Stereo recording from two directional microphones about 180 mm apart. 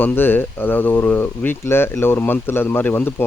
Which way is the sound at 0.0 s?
10° left (ahead or behind).